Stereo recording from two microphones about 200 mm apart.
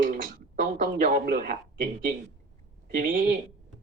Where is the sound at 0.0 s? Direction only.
40° right (ahead or behind).